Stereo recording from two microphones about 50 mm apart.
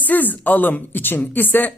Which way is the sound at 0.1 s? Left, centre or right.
Left.